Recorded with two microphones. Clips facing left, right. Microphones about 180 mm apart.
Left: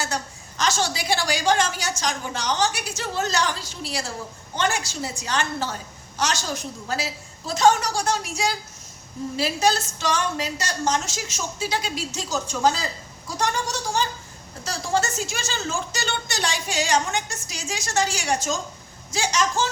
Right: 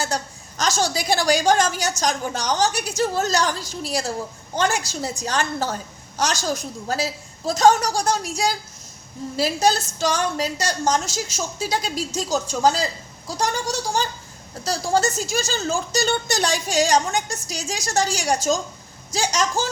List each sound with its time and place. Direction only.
0.0 s a woman's voice: 40° right (ahead or behind)